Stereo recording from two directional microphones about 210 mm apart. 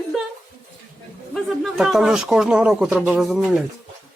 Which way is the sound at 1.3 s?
Centre (ahead or behind).